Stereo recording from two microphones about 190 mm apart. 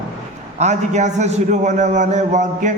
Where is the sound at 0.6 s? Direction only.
40° right (ahead or behind).